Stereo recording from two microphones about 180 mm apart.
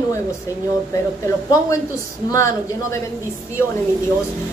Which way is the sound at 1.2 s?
15° left (ahead or behind).